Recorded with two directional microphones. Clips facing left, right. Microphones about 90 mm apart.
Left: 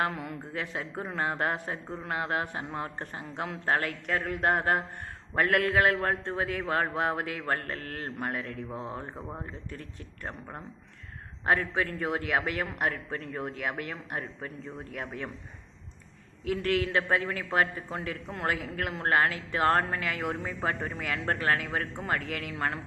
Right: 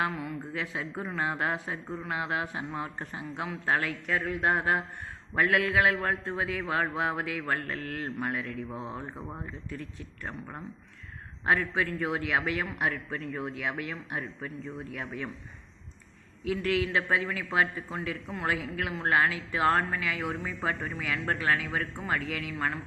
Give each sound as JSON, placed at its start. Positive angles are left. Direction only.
{"t": 0.0, "sound": "a man's voice", "side_deg": 50}
{"t": 8.7, "sound": "speech", "side_deg": -15}
{"t": 11.4, "sound": "a man's voice", "side_deg": 40}
{"t": 16.5, "sound": "a man's voice", "side_deg": 45}